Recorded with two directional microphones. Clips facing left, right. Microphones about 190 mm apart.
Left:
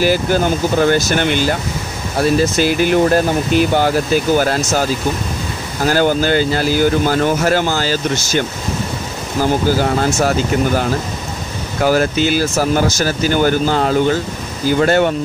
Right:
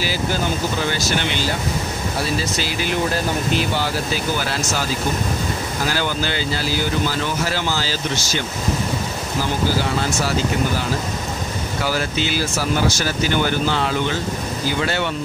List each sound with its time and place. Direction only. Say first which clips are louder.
0.0 s speech: left 8 dB; 50° left (ahead or behind)
5.9 s speech: left 11 dB; 50° left (ahead or behind)
11.8 s speech: left 9 dB; 50° left (ahead or behind)